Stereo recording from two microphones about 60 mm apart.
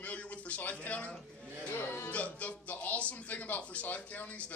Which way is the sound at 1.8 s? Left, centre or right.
Left.